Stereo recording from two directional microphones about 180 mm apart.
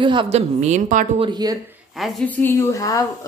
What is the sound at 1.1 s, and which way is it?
Speech, 25° right (ahead or behind).